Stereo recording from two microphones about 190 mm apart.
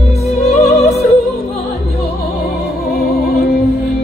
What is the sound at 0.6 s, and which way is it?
Opera, 35° left (ahead or behind).